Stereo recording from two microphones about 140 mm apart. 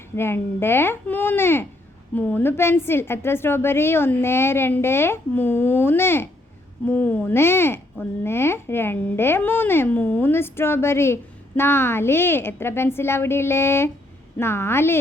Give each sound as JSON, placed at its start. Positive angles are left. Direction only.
{"t": 0.2, "sound": "speech", "side_deg": 15}